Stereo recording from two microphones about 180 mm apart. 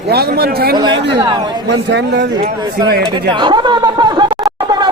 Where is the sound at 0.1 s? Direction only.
60° right (ahead or behind).